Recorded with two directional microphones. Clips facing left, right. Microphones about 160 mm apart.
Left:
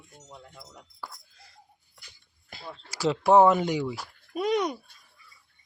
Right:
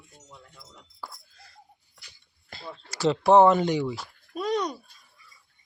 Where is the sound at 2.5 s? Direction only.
10° left (ahead or behind).